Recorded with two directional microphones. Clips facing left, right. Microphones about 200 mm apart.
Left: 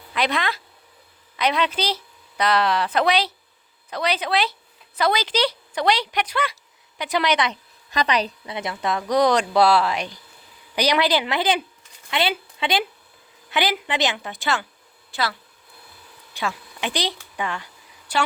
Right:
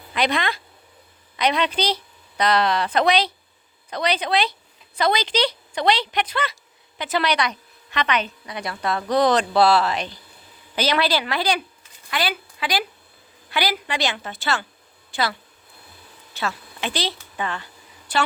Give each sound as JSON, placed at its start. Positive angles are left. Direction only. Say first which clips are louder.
{"t": 0.1, "sound": "a woman's voice", "louder": "right 1 dB", "side_deg": 0}
{"t": 7.9, "sound": "a woman's voice", "louder": "left 1 dB", "side_deg": 35}
{"t": 15.1, "sound": "speech", "louder": "right 1 dB", "side_deg": 0}
{"t": 16.3, "sound": "a woman's voice", "louder": "even", "side_deg": 15}